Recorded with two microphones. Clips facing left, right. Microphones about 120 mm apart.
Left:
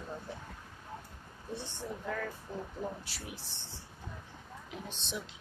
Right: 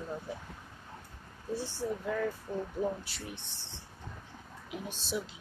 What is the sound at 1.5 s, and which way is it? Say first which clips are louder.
Speech: right 6 dB; 10° right (ahead or behind).